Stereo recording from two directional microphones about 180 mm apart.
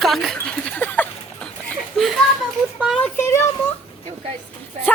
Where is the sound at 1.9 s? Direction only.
Centre (ahead or behind).